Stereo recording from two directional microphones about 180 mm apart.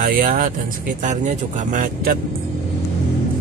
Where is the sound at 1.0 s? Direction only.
40° right (ahead or behind).